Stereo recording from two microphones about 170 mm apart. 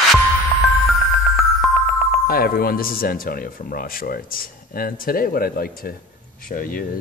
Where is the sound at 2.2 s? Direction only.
60° left (ahead or behind).